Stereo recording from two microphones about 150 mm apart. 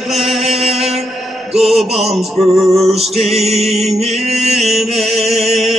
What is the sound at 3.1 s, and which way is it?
Music, 45° right (ahead or behind).